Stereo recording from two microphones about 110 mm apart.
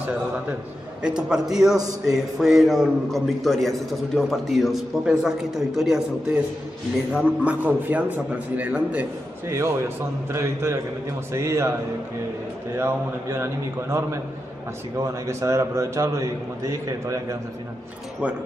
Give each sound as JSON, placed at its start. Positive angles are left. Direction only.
{"t": 1.0, "sound": "a man's voice", "side_deg": -5}
{"t": 9.5, "sound": "a man's voice", "side_deg": -25}
{"t": 12.7, "sound": "a man's voice", "side_deg": -25}